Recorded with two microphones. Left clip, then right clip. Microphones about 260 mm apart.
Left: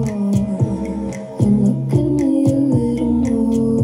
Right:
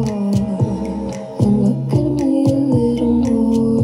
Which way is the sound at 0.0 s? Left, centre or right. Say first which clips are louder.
Right 1 dB; right.